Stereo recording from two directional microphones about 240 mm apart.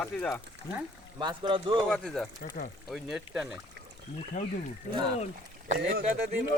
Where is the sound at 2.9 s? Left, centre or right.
Centre.